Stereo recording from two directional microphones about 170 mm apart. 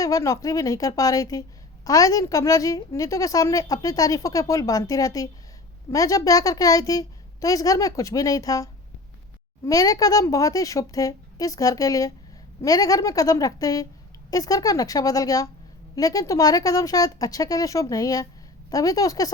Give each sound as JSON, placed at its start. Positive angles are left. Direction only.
{"t": 0.0, "sound": "a woman's voice", "side_deg": 20}